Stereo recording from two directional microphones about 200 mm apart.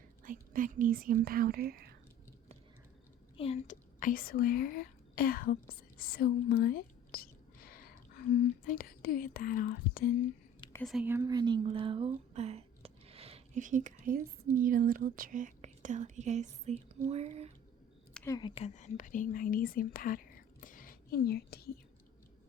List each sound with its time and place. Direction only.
0.3 s speech: 40° right (ahead or behind)
3.3 s speech: 30° left (ahead or behind); by 10.1 s 45° left (ahead or behind)
10.8 s speech: 5° right (ahead or behind); by 17.5 s 30° right (ahead or behind)
18.1 s a sound: 10° left (ahead or behind)
18.3 s speech: 25° left (ahead or behind); by 21.7 s 50° left (ahead or behind)